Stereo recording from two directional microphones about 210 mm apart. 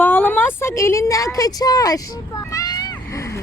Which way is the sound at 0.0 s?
10° left (ahead or behind).